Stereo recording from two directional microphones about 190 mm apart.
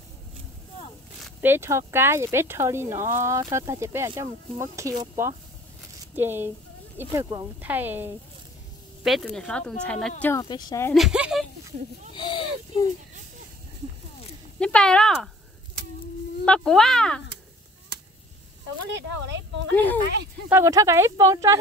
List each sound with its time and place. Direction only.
1.4 s speech: 10° right (ahead or behind)
9.0 s speech: centre (ahead or behind)
10.3 s speech: 20° left (ahead or behind)
10.9 s speech: centre (ahead or behind)
12.1 s speech: 25° left (ahead or behind)
14.6 s speech: 5° left (ahead or behind)
16.4 s speech: 5° left (ahead or behind)
18.9 s speech: 70° right (ahead or behind)
20.4 s speech: 15° right (ahead or behind)